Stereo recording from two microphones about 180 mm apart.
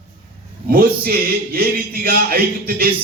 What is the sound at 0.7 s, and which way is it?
Speech, 60° right (ahead or behind).